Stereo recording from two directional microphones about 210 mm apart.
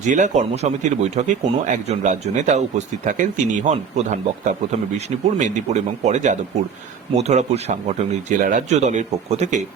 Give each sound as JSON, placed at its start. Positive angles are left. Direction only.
{"t": 0.0, "sound": "speech", "side_deg": -35}